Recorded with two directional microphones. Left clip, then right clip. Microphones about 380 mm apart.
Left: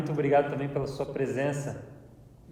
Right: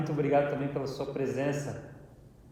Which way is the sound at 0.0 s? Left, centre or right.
Left.